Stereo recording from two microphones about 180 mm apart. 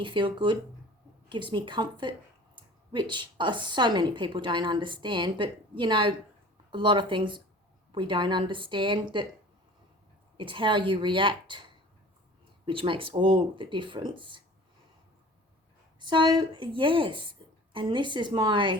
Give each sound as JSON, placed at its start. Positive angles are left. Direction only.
{"t": 0.0, "sound": "a woman's voice", "side_deg": -25}
{"t": 10.3, "sound": "a woman's voice", "side_deg": -30}
{"t": 12.6, "sound": "a woman's voice", "side_deg": -30}
{"t": 16.0, "sound": "a woman's voice", "side_deg": -25}